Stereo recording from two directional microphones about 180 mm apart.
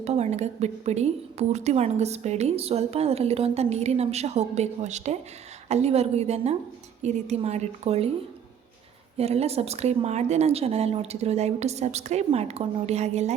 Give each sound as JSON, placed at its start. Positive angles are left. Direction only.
{"t": 0.0, "sound": "a woman's voice", "side_deg": -35}
{"t": 9.1, "sound": "a woman's voice", "side_deg": -35}